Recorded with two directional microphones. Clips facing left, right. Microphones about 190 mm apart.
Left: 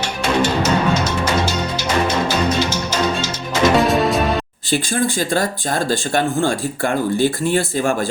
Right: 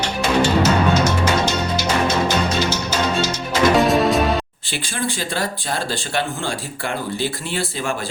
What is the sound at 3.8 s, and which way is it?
Music, centre (ahead or behind).